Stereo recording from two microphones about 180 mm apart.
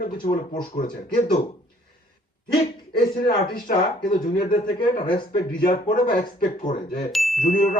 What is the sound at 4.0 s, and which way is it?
Ding, 55° left (ahead or behind).